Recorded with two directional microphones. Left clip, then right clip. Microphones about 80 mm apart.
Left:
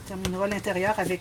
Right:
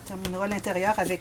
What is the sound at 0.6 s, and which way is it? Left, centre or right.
Speech, right.